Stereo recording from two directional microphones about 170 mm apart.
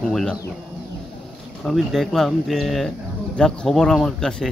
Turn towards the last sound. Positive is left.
turn(degrees=5)  # may be behind; listen again after turning